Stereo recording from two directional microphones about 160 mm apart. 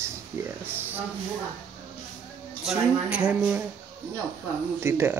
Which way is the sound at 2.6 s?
5° right (ahead or behind).